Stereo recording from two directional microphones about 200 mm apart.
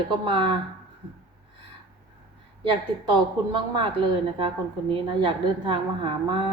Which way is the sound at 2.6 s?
25° right (ahead or behind).